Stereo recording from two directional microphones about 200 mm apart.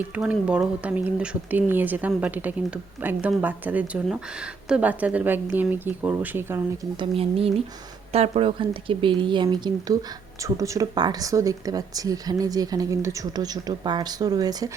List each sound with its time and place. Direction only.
0.2 s speech: 5° right (ahead or behind)
7.0 s speech: 30° right (ahead or behind)